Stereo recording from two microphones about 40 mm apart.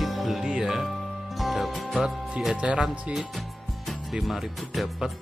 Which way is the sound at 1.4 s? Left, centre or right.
Centre.